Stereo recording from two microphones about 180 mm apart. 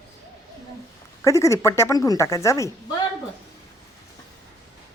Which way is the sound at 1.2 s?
15° left (ahead or behind).